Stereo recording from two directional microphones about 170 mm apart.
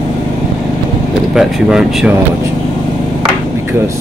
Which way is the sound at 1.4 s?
5° right (ahead or behind).